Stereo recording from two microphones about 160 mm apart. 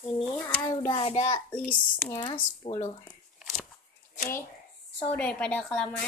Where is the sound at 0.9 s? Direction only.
40° left (ahead or behind).